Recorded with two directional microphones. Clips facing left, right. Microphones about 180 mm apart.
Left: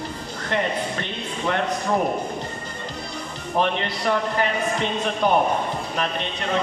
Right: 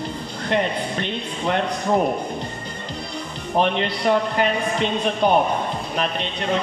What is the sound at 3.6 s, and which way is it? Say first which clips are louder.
A man's voice: right 3 dB; 20° right (ahead or behind).